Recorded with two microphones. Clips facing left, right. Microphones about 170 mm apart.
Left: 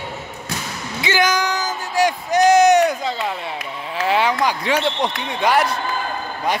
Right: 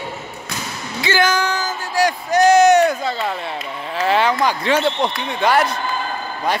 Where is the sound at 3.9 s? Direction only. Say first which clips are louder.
Right 1 dB; 10° left (ahead or behind).